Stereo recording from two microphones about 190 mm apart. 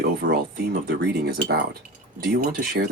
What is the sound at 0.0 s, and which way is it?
Speech, 55° right (ahead or behind).